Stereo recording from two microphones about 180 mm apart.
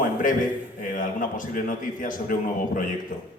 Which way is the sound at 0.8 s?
45° left (ahead or behind).